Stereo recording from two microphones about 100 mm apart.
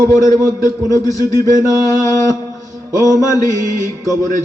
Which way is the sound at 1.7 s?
35° left (ahead or behind).